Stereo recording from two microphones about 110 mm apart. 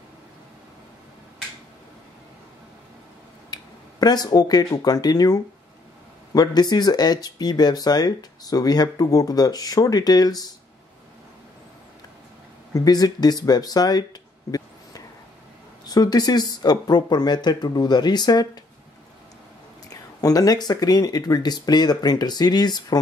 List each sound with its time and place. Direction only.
3.4 s speech: 40° left (ahead or behind)
12.7 s speech: 35° left (ahead or behind)
19.9 s speech: 35° left (ahead or behind)